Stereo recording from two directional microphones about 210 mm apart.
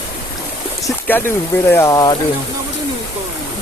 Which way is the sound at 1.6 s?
10° left (ahead or behind).